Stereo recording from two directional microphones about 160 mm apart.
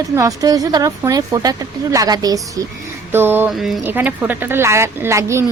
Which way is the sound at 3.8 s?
10° right (ahead or behind).